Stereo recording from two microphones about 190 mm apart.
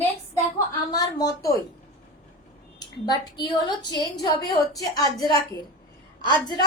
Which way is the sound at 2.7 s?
20° left (ahead or behind).